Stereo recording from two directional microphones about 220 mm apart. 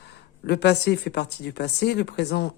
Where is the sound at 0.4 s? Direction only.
50° left (ahead or behind).